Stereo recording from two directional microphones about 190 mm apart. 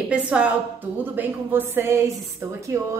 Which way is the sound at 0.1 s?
5° right (ahead or behind).